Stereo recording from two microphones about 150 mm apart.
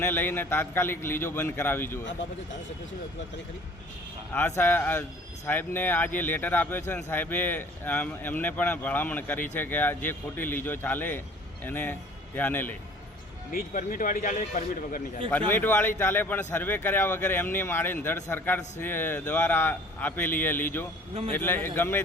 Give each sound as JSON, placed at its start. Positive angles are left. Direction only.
{"t": 0.0, "sound": "speech", "side_deg": 15}
{"t": 4.3, "sound": "a man's voice", "side_deg": 15}
{"t": 13.5, "sound": "a man's voice", "side_deg": 65}
{"t": 15.3, "sound": "speech", "side_deg": 10}